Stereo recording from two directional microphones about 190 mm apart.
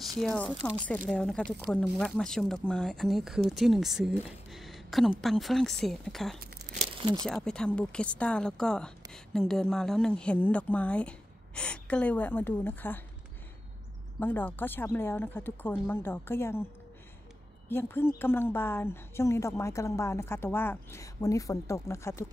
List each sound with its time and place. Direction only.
0.2 s a woman's voice: 10° left (ahead or behind)
6.8 s crumpling: 25° right (ahead or behind)
7.2 s a woman's voice: 5° left (ahead or behind)
14.2 s a woman's voice: 10° left (ahead or behind)
17.6 s a woman's voice: 10° left (ahead or behind)